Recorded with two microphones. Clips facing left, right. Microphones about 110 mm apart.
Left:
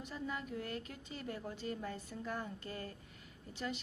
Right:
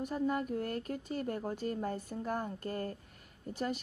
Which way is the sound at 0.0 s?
50° right (ahead or behind).